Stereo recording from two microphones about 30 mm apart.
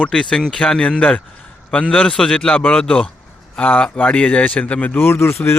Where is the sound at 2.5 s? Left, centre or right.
Left.